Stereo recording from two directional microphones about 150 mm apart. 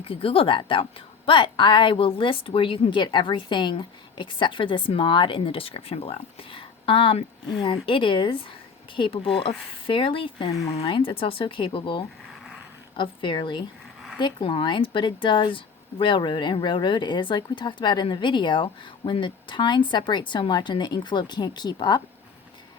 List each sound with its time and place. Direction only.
0.1 s speech: 40° left (ahead or behind)
10.7 s speech: 40° left (ahead or behind)